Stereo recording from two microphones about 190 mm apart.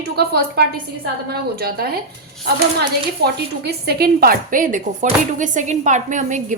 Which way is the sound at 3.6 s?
55° right (ahead or behind).